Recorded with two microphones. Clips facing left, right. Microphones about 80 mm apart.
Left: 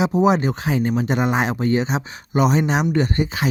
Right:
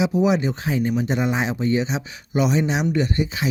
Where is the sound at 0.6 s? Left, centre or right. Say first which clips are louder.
Left 2 dB; left.